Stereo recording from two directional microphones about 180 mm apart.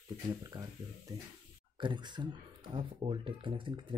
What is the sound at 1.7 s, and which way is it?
Speech, 25° right (ahead or behind).